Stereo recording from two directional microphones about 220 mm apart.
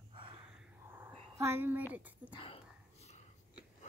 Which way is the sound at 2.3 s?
25° left (ahead or behind).